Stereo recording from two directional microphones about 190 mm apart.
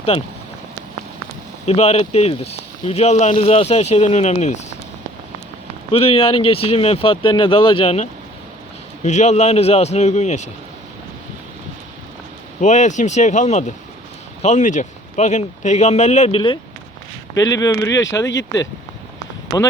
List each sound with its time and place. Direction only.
1.6 s speech: 35° left (ahead or behind)
5.9 s speech: 30° left (ahead or behind)
9.0 s speech: 35° left (ahead or behind)
12.5 s speech: 40° left (ahead or behind); by 17.8 s 20° left (ahead or behind)
18.3 s speech: 70° left (ahead or behind)